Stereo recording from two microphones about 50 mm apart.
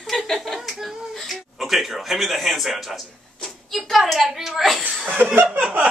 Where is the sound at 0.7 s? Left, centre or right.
Centre.